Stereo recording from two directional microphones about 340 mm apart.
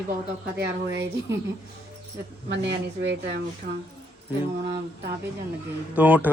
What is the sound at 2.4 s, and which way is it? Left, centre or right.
Speech, right.